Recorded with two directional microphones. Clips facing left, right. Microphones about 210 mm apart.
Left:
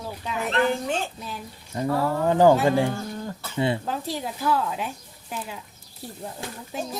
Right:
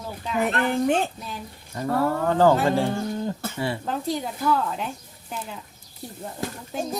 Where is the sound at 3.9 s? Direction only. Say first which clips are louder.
Right 2 dB; centre (ahead or behind).